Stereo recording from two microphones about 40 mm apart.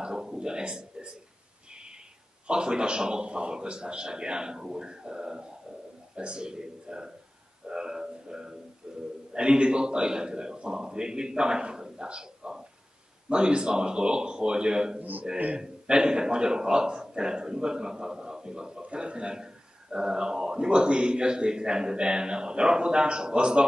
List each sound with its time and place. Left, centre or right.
0.0 s a sound: centre
2.4 s a man's voice: right
7.6 s a sound: centre
9.3 s a man's voice: right
15.0 s a man's voice: right
15.3 s a man's voice: right
15.6 s a man's voice: centre